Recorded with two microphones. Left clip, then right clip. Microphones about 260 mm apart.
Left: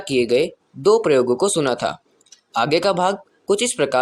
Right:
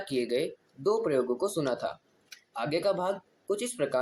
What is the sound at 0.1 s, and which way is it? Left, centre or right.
Speech, left.